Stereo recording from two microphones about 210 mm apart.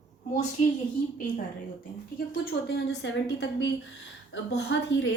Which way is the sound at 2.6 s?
55° left (ahead or behind).